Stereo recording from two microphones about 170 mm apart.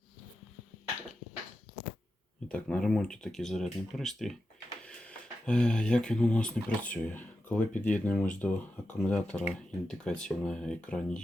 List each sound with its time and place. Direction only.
2.5 s speech: 5° left (ahead or behind)